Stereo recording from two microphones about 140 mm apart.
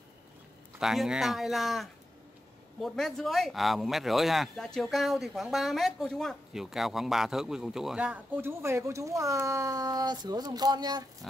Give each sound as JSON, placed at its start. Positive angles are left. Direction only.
{"t": 0.7, "sound": "speech", "side_deg": -5}